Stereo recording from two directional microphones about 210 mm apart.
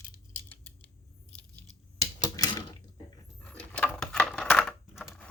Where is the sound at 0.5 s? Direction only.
5° left (ahead or behind).